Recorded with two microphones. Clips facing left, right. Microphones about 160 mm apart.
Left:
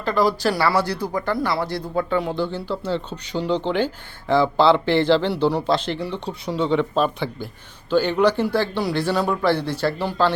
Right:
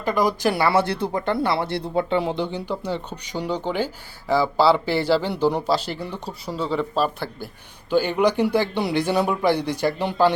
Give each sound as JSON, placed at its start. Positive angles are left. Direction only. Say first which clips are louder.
{"t": 0.0, "sound": "a man's voice", "louder": "left 1 dB", "side_deg": -15}